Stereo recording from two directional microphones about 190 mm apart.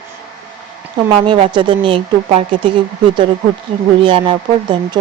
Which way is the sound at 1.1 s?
25° right (ahead or behind).